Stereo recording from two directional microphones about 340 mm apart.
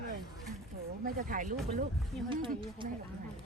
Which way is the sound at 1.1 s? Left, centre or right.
Right.